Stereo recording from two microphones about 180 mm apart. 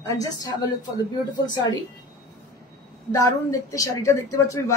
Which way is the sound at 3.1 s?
20° left (ahead or behind).